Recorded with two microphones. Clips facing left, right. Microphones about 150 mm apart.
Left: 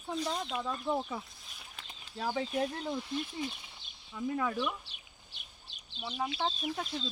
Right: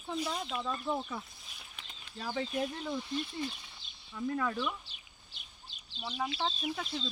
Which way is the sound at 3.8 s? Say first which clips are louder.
Even; 60° left (ahead or behind).